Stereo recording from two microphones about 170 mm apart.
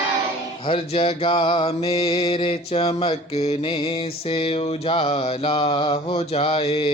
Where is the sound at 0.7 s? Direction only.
35° left (ahead or behind).